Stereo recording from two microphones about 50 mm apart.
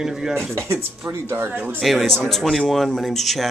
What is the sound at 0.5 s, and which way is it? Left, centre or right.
Speech, right.